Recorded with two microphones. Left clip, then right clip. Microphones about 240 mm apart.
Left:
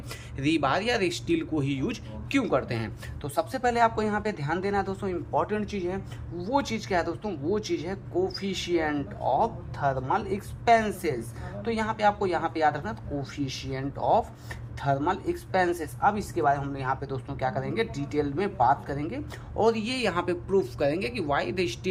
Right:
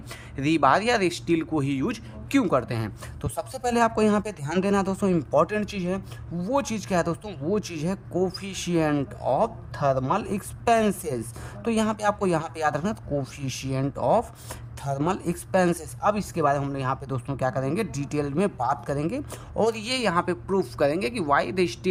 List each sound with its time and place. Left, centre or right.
0.1 s speech: centre
2.4 s speech: right
3.2 s a man's voice: right; by 21.8 s centre